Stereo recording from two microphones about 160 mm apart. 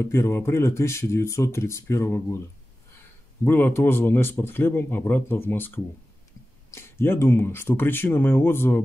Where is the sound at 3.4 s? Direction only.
15° left (ahead or behind).